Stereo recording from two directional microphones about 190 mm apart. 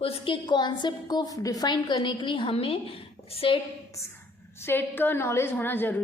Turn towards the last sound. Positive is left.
turn(degrees=10)  # may be behind; listen again after turning